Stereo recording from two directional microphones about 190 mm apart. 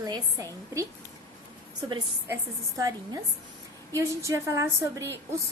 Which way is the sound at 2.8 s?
20° right (ahead or behind).